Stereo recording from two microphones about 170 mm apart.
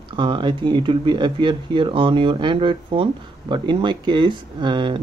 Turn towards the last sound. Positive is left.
turn(degrees=-30)  # may be behind; listen again after turning